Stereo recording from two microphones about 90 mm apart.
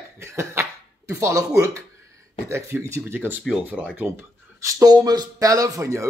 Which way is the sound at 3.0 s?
20° right (ahead or behind).